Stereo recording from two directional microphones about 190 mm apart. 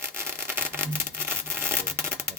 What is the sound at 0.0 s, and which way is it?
Rub, 15° right (ahead or behind).